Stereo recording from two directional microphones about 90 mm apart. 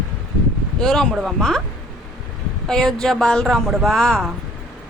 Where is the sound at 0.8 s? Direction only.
5° left (ahead or behind).